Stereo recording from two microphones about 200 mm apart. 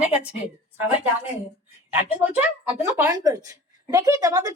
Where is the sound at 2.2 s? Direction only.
10° right (ahead or behind).